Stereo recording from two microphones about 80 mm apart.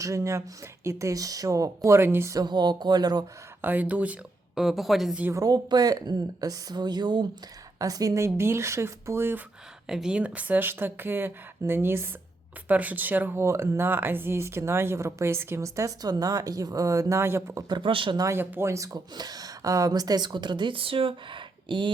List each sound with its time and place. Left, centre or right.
0.0 s speech: right
2.3 s a woman's voice: right
3.6 s speech: right
4.5 s a woman's voice: centre
5.3 s a woman's voice: right
5.6 s a woman's voice: right
7.8 s a woman's voice: right
8.2 s speech: right
9.9 s speech: centre
13.3 s speech: right
17.7 s speech: right
18.3 s speech: right
18.9 s a woman's voice: right